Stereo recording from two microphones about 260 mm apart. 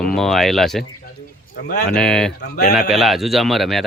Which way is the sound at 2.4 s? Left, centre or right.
Left.